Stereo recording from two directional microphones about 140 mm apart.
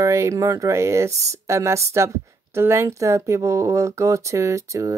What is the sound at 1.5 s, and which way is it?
Speech, 20° right (ahead or behind).